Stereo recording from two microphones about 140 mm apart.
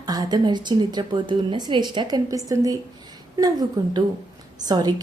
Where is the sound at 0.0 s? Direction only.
30° right (ahead or behind).